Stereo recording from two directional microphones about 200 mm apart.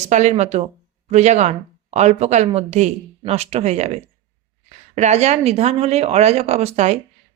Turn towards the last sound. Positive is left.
turn(degrees=-35)  # may be behind; listen again after turning